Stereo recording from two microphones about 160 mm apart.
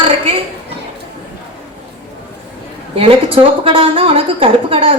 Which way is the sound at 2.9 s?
35° right (ahead or behind).